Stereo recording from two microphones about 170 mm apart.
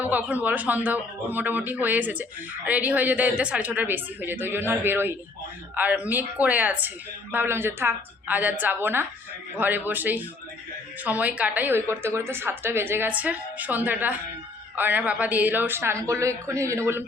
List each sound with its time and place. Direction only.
0.0 s a woman's voice: 10° right (ahead or behind)